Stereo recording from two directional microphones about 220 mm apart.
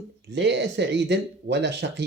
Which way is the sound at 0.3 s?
50° right (ahead or behind).